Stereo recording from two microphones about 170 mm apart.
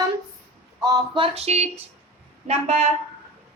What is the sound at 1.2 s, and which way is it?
Speech, 40° right (ahead or behind).